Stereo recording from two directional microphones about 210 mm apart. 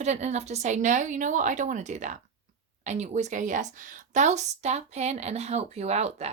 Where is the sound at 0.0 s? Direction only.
35° right (ahead or behind).